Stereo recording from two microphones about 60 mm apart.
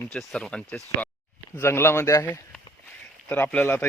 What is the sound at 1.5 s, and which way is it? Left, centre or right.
Speech, left.